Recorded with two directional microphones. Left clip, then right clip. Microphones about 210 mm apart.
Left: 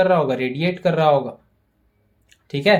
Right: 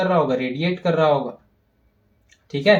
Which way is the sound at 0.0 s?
40° left (ahead or behind).